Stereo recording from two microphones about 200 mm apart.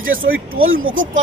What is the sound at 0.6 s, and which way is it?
Speech, 90° right.